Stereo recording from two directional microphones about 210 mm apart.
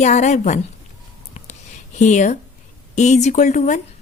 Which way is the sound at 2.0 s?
35° left (ahead or behind).